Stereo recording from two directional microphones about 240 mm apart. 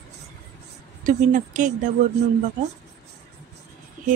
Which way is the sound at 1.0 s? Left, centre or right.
Right.